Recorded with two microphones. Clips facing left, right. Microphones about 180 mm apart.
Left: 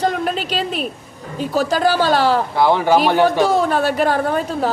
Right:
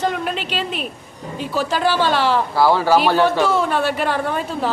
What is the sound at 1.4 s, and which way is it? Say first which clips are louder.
A woman's voice: left 3 dB; 40° left (ahead or behind).